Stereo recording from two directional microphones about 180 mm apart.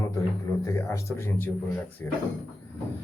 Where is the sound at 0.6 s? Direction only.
15° left (ahead or behind).